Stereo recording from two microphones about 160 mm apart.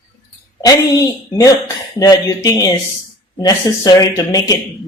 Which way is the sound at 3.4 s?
25° left (ahead or behind).